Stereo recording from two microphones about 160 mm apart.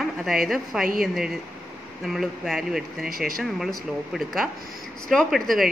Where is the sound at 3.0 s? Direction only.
65° right (ahead or behind).